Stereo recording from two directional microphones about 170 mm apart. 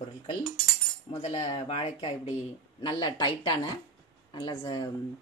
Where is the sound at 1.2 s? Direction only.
35° left (ahead or behind).